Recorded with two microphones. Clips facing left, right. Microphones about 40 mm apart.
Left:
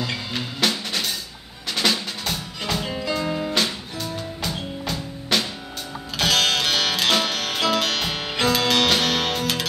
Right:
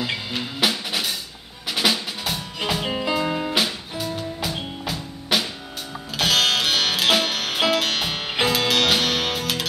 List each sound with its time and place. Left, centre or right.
0.0 s music: centre
1.7 s drum: centre
2.9 s music: right
3.5 s music: centre